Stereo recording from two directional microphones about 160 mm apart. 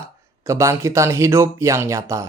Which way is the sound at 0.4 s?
20° right (ahead or behind).